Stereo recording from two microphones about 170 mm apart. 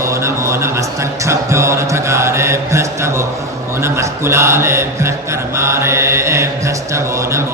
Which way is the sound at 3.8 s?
15° right (ahead or behind).